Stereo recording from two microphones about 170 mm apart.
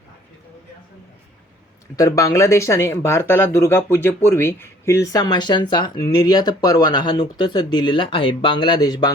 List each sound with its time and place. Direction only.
2.0 s speech: 20° left (ahead or behind)